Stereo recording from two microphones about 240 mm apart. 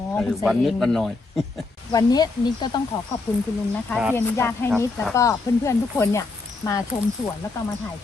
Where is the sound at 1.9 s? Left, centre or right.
Centre.